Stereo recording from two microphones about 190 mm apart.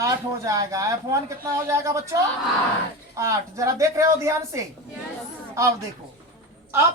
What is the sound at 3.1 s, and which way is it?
Speech, 15° right (ahead or behind).